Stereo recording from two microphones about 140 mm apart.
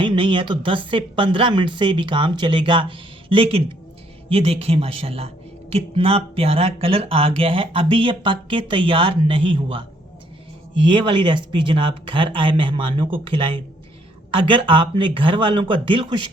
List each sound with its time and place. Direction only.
0.0 s speech: 35° right (ahead or behind)